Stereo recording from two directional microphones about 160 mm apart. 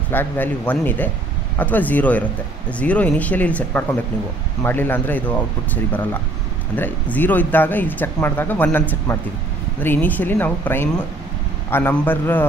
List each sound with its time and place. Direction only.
0.1 s speech: 10° left (ahead or behind)
6.7 s speech: 10° left (ahead or behind)